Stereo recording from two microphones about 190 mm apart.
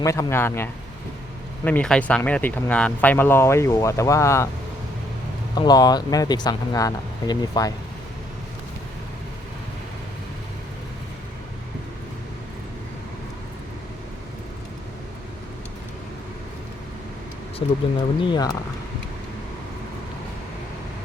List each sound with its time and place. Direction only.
0.0 s speech: 15° left (ahead or behind)
5.5 s speech: 20° left (ahead or behind)
17.6 s speech: 30° left (ahead or behind)